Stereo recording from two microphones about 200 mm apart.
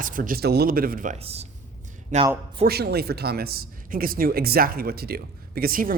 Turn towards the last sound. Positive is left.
turn(degrees=-45)  # may be behind; listen again after turning